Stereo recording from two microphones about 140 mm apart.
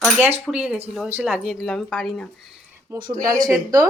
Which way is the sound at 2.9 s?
30° right (ahead or behind).